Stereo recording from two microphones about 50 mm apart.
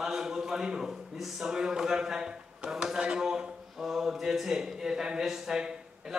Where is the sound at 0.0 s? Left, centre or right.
Centre.